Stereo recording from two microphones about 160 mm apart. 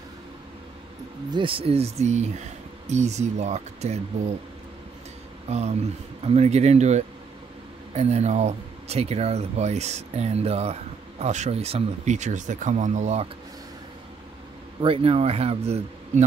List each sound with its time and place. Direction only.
1.3 s speech: 35° right (ahead or behind)
5.5 s speech: 40° right (ahead or behind)
14.8 s speech: 35° right (ahead or behind)